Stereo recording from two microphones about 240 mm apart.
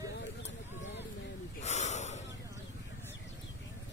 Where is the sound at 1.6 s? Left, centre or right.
Left.